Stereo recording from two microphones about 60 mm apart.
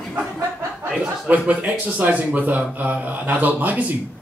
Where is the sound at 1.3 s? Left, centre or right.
Right.